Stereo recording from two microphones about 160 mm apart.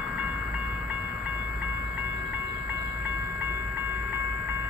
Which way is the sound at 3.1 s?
15° right (ahead or behind).